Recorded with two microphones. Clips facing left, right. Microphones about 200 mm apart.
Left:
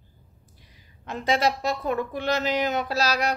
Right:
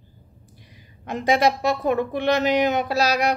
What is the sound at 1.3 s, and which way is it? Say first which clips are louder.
Speech: right 4 dB; 15° right (ahead or behind).